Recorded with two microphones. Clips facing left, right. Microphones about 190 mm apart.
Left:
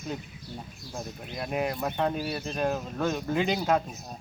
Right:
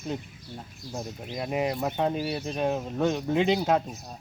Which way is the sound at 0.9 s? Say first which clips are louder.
Right 3 dB; 20° right (ahead or behind).